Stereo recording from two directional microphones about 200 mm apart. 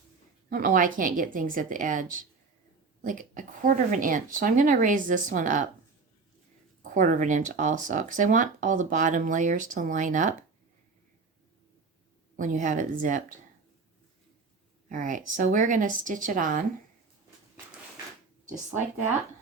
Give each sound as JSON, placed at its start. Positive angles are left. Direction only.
{"t": 0.5, "sound": "a woman's voice", "side_deg": -45}
{"t": 6.9, "sound": "speech", "side_deg": -40}
{"t": 12.4, "sound": "speech", "side_deg": -40}
{"t": 14.8, "sound": "speech", "side_deg": -40}